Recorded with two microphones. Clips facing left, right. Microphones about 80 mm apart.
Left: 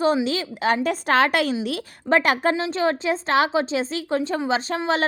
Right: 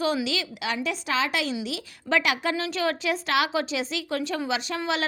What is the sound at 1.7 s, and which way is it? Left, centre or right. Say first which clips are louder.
Speech: left 6 dB; left.